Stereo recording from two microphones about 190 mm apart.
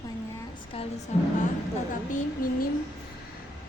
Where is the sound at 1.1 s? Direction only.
35° left (ahead or behind).